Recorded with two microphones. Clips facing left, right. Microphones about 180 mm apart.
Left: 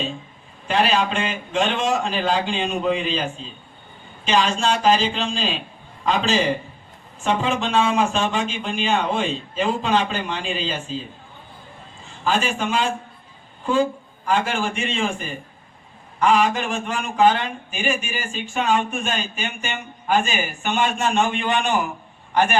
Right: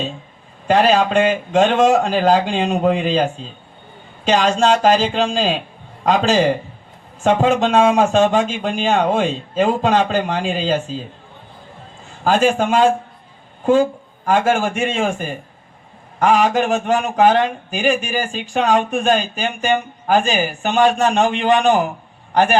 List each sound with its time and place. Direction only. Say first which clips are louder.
0.7 s speech: right 6 dB; 40° right (ahead or behind)
4.3 s speech: right 5 dB; 45° right (ahead or behind)
12.2 s speech: right 7 dB; 45° right (ahead or behind)
14.3 s a man's voice: right 6 dB; 45° right (ahead or behind)